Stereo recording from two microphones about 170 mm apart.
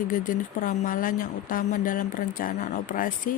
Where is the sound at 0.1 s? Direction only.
50° left (ahead or behind).